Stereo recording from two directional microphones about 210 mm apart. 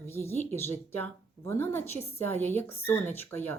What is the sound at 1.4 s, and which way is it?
A woman's voice, 10° left (ahead or behind).